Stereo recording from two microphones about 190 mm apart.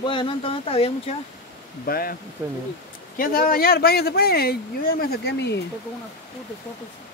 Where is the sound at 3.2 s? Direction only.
50° left (ahead or behind).